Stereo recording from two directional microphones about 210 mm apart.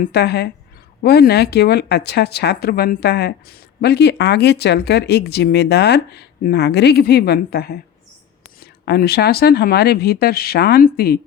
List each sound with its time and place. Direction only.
0.0 s speech: 50° left (ahead or behind)
8.8 s speech: 50° left (ahead or behind)